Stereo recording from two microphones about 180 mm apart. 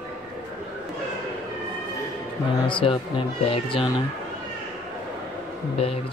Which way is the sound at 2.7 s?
30° left (ahead or behind).